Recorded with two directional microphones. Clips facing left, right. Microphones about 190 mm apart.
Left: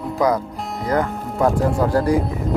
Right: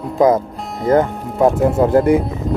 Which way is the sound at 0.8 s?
25° right (ahead or behind).